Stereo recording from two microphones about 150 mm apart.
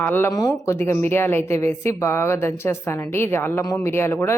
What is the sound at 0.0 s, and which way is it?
Speech, 15° left (ahead or behind).